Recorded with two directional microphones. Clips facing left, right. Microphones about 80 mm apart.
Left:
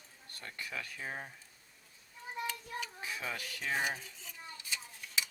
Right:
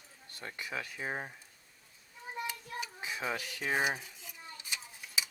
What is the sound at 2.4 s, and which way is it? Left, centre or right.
Child singing, centre.